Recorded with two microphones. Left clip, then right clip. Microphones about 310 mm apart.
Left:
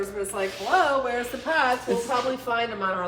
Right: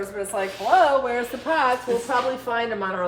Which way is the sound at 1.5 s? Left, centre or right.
Right.